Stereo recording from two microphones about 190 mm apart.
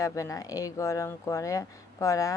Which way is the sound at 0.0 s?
15° left (ahead or behind).